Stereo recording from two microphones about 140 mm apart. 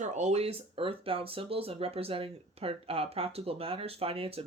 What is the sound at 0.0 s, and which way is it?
Speech, 55° right (ahead or behind).